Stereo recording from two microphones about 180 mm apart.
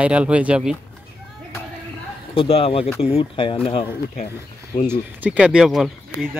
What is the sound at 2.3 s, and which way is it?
Speech, 30° left (ahead or behind).